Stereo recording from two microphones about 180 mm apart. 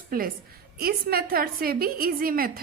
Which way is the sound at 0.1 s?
55° right (ahead or behind).